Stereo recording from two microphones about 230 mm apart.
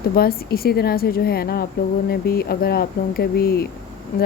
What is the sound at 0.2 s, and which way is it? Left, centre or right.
Speech, left.